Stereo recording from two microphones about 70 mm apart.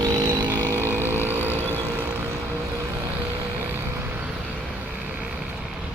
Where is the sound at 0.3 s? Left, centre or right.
Right.